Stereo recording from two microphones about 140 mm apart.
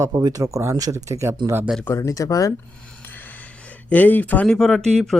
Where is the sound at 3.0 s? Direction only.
15° left (ahead or behind).